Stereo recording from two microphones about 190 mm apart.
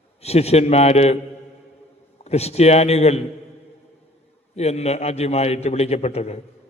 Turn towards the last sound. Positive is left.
turn(degrees=35)  # may be behind; listen again after turning